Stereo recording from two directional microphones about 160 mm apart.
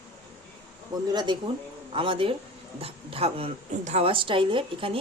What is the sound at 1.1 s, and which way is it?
Speech, 25° right (ahead or behind).